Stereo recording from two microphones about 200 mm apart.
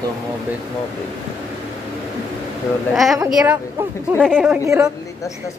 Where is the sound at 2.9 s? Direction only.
Centre (ahead or behind).